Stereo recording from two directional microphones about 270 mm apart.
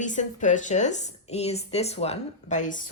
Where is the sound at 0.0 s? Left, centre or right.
Left.